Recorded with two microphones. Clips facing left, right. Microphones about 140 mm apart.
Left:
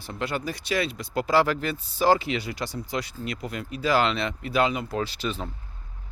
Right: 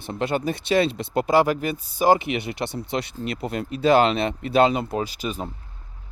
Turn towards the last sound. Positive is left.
turn(degrees=-10)  # may be behind; listen again after turning